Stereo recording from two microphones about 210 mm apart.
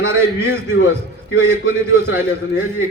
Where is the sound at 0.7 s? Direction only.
65° left (ahead or behind).